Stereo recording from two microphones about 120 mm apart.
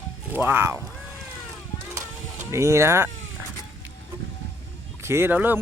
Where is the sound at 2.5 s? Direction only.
25° right (ahead or behind).